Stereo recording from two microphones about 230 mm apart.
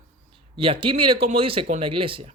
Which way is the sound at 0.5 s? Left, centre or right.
Right.